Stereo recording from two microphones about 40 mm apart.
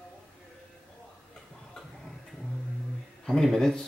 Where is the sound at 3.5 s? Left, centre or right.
Centre.